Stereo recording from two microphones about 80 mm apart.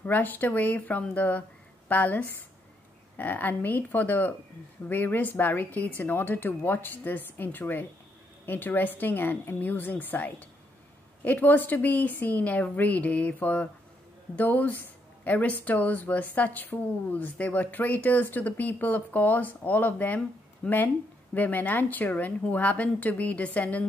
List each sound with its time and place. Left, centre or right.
0.0 s speech: left